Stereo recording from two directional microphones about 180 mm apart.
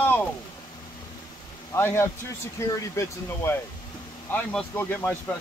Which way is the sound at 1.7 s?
15° left (ahead or behind).